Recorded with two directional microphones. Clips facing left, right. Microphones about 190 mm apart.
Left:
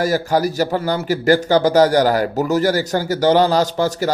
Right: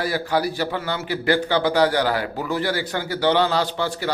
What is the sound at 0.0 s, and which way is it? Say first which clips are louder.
A man's voice: left 5 dB; 45° left (ahead or behind).